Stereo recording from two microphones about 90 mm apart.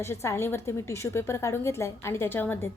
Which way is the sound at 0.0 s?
30° left (ahead or behind).